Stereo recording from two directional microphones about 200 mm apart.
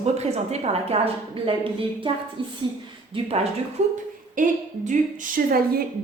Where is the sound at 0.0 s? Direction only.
30° right (ahead or behind).